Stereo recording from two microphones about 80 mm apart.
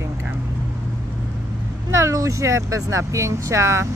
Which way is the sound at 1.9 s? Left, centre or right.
Right.